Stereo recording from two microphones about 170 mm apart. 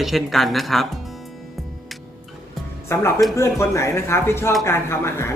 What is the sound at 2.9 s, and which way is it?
Speech, 15° left (ahead or behind).